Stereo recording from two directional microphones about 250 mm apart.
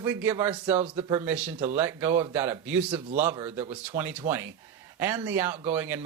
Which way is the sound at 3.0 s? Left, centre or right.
Right.